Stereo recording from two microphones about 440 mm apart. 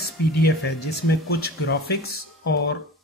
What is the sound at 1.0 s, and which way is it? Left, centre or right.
Speech, left.